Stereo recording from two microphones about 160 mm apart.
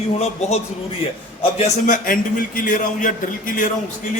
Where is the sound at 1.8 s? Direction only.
60° left (ahead or behind).